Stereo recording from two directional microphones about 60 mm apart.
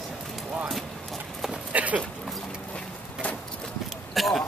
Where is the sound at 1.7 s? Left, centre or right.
Right.